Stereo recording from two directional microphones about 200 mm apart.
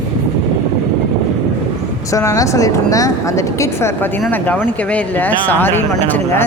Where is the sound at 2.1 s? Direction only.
15° left (ahead or behind).